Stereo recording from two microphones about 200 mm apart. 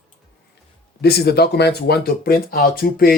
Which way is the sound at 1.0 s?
55° left (ahead or behind).